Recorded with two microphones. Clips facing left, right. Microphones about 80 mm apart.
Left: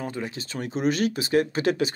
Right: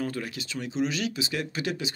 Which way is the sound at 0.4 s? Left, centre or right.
Left.